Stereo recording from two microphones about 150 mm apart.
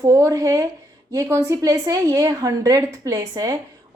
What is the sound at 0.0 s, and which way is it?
Speech, 20° right (ahead or behind).